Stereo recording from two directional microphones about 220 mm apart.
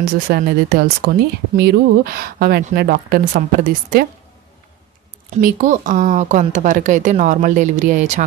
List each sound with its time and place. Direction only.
0.3 s speech: 45° right (ahead or behind)
5.3 s speech: 35° right (ahead or behind)